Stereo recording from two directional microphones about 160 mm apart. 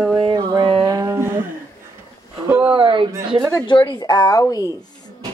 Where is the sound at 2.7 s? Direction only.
30° right (ahead or behind).